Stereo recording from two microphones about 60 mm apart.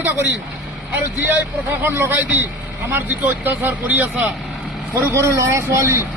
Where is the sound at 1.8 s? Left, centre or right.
Right.